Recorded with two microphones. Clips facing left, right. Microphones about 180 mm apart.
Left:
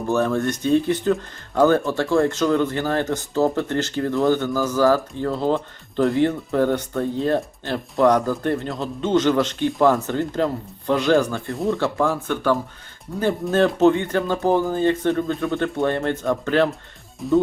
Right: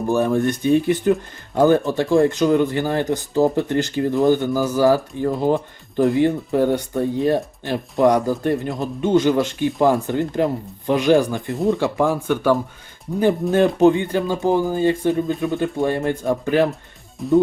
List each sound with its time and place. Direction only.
0.1 s speech: 15° right (ahead or behind)
17.2 s speech: centre (ahead or behind)